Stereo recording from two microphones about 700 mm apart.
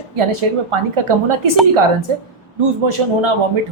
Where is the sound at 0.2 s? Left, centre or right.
Right.